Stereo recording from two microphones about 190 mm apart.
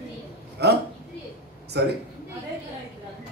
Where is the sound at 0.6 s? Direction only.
60° right (ahead or behind).